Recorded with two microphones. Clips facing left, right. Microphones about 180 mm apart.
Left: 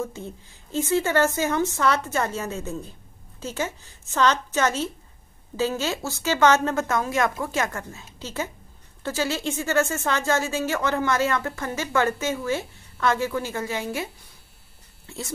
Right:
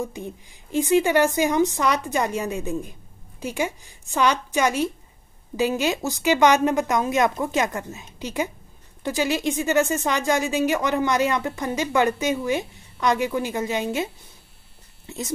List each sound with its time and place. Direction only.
0.0 s speech: 15° right (ahead or behind)
15.0 s speech: 20° right (ahead or behind)